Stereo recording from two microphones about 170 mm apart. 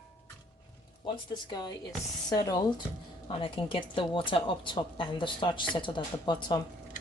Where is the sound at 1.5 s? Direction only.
25° left (ahead or behind).